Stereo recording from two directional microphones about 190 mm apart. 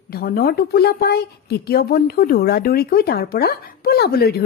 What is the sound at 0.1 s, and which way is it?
A woman's voice, 55° left (ahead or behind).